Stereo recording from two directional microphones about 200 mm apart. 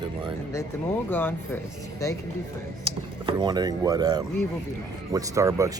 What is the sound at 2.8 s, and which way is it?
Speech, 25° right (ahead or behind).